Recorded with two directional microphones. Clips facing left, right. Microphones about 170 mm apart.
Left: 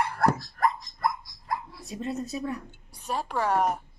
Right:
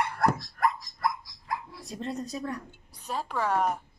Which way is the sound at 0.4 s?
25° left (ahead or behind).